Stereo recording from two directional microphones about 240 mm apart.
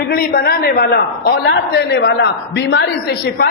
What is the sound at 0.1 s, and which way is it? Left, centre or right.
A man's voice, left.